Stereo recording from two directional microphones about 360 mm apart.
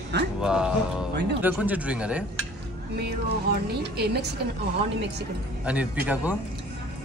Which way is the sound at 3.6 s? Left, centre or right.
Right.